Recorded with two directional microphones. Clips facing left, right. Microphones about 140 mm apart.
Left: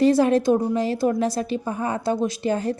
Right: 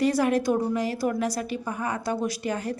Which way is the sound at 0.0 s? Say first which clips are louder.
Left 5 dB; 25° left (ahead or behind).